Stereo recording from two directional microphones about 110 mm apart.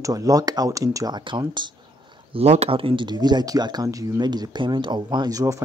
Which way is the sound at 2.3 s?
75° right (ahead or behind).